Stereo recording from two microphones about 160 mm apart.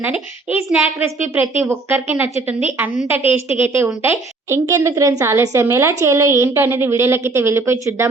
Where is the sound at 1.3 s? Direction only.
15° right (ahead or behind).